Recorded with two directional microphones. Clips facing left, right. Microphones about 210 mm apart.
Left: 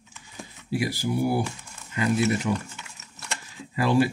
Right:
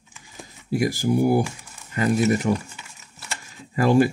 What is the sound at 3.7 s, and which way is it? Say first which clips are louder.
Speech: right 4 dB; 45° right (ahead or behind).